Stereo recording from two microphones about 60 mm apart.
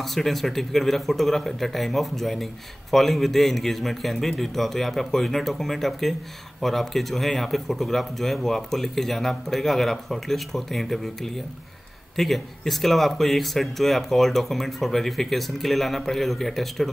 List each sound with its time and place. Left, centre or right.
0.0 s speech: centre
12.2 s speech: centre